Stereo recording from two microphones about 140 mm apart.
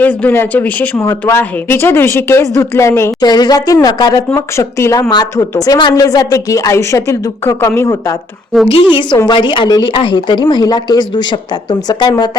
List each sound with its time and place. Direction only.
0.0 s speech: 10° left (ahead or behind)
3.2 s speech: 30° left (ahead or behind)
8.7 s a woman's voice: 35° left (ahead or behind)